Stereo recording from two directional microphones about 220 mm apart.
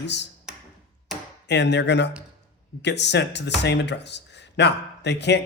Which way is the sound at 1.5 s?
50° left (ahead or behind).